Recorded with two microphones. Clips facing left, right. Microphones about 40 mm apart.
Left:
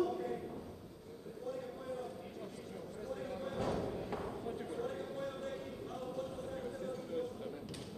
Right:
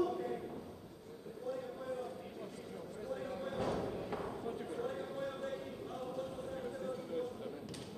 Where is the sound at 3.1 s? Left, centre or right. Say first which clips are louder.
Right 1 dB; centre.